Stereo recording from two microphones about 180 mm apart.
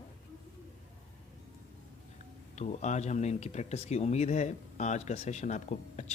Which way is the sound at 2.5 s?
40° left (ahead or behind).